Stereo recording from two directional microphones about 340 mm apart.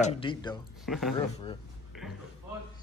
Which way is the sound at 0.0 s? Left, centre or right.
Centre.